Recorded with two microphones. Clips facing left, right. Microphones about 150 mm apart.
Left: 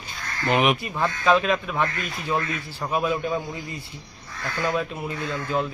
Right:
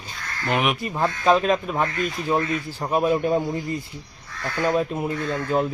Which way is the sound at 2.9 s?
40° right (ahead or behind).